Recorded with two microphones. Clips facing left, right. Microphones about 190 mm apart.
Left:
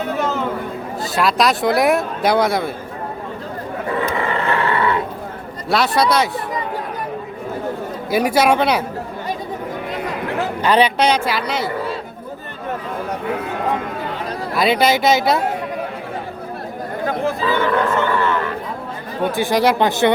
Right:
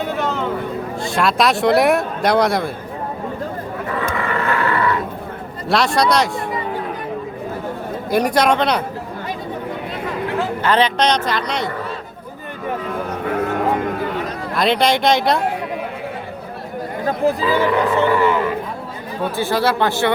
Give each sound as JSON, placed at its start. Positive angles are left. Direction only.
{"t": 0.0, "sound": "a sound", "side_deg": 0}
{"t": 1.1, "sound": "speech", "side_deg": 0}
{"t": 4.4, "sound": "roar", "side_deg": 25}
{"t": 5.6, "sound": "speech", "side_deg": 0}
{"t": 8.1, "sound": "a woman's voice", "side_deg": 5}
{"t": 10.6, "sound": "a woman's voice", "side_deg": 10}
{"t": 14.5, "sound": "speech", "side_deg": 5}
{"t": 17.4, "sound": "speech", "side_deg": -15}
{"t": 19.2, "sound": "a woman's voice", "side_deg": 15}